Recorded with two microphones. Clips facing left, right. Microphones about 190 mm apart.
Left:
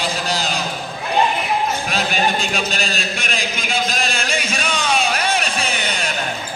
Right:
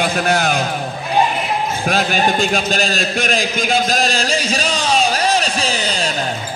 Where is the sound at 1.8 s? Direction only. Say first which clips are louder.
Right 4 dB; 45° right (ahead or behind).